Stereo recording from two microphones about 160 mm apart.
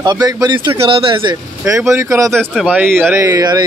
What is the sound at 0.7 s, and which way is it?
Speech, 35° right (ahead or behind).